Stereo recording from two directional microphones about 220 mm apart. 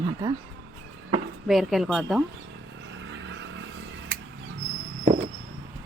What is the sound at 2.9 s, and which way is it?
Vehicle, 55° right (ahead or behind).